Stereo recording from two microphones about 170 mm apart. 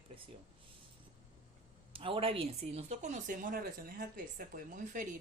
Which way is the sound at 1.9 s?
30° right (ahead or behind).